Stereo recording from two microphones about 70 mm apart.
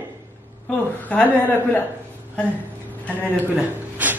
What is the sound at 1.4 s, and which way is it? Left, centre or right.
Speech, left.